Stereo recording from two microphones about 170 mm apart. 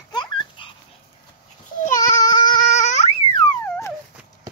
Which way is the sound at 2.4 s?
50° left (ahead or behind).